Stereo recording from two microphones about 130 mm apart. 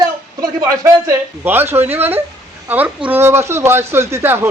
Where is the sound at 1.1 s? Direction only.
15° right (ahead or behind).